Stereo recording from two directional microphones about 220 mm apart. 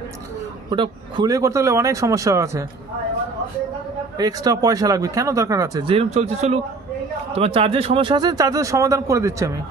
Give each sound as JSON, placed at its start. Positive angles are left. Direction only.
{"t": 0.7, "sound": "speech", "side_deg": -20}
{"t": 4.2, "sound": "speech", "side_deg": -15}